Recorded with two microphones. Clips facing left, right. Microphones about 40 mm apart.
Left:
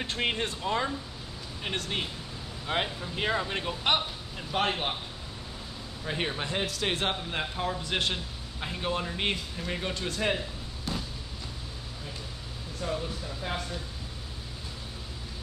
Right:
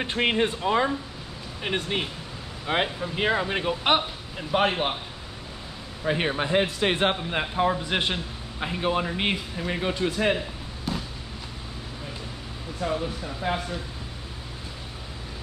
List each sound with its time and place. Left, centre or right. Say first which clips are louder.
0.0 s a man's voice: right 6 dB; right
6.0 s a man's voice: right 7 dB; right
10.9 s fireworks: right 4 dB; centre
12.8 s a man's voice: right 5 dB; right